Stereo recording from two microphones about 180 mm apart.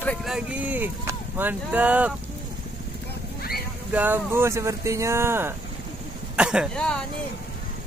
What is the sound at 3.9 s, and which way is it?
Speech, 10° right (ahead or behind).